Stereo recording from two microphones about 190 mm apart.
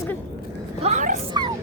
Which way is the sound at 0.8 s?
40° right (ahead or behind).